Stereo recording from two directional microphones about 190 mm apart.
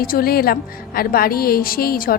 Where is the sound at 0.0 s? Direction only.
50° left (ahead or behind).